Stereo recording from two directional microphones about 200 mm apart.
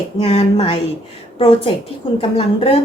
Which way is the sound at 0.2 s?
30° left (ahead or behind).